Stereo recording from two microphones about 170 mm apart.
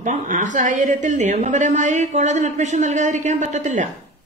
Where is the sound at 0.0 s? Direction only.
45° right (ahead or behind).